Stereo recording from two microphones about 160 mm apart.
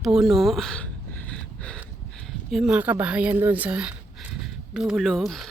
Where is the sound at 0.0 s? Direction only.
Centre (ahead or behind).